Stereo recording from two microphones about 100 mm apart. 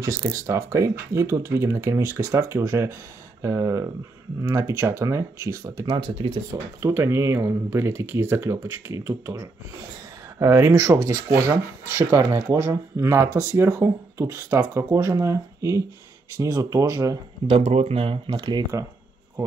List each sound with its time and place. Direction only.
0.0 s speech: 30° right (ahead or behind)
5.9 s speech: 55° right (ahead or behind)
6.8 s speech: 30° right (ahead or behind)
17.5 s speech: 85° right; by 18.7 s 50° right (ahead or behind)